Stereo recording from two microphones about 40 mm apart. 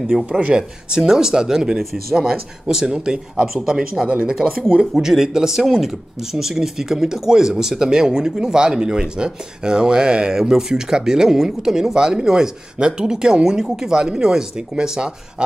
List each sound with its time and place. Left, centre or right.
0.3 s speech: right
0.6 s speech: centre
4.1 s speech: right
4.9 s speech: centre